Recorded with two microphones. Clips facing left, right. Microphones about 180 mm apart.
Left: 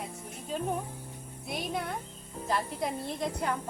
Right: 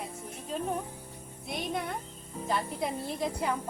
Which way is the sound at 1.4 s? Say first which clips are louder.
Even; centre (ahead or behind).